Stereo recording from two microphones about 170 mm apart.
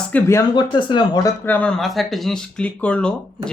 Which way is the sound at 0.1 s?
15° left (ahead or behind).